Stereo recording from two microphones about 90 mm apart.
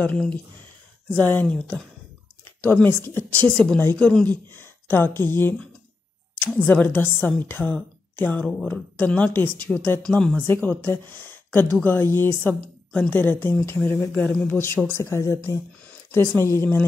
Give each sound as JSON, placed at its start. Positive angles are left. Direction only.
{"t": 0.0, "sound": "speech", "side_deg": 15}
{"t": 1.5, "sound": "speech", "side_deg": 10}
{"t": 3.4, "sound": "speech", "side_deg": 10}
{"t": 10.4, "sound": "speech", "side_deg": 20}